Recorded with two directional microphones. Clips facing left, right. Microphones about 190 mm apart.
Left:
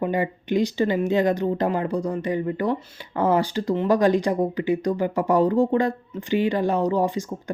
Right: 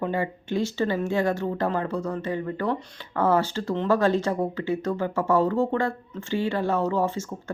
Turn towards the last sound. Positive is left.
turn(degrees=15)  # may be behind; listen again after turning